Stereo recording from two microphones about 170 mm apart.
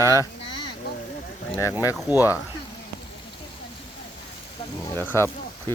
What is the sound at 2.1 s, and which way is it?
Speech, 10° right (ahead or behind).